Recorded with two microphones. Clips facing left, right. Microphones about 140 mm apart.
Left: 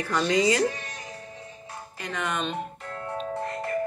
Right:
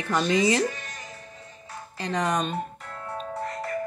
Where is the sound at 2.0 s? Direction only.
35° right (ahead or behind).